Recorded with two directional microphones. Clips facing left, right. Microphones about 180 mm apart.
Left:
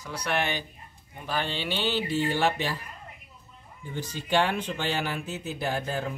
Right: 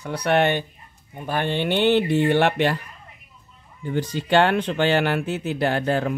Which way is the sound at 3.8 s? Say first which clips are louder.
Right 10 dB; 70° right (ahead or behind).